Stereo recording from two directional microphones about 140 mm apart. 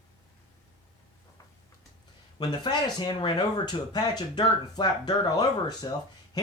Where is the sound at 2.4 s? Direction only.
30° left (ahead or behind).